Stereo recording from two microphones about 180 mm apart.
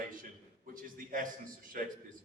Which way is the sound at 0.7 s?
50° right (ahead or behind).